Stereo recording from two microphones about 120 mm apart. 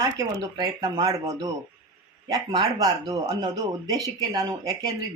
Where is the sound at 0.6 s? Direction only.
35° right (ahead or behind).